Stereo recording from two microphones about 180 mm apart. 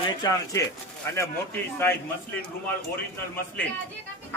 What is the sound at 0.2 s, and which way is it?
Speech, 20° left (ahead or behind).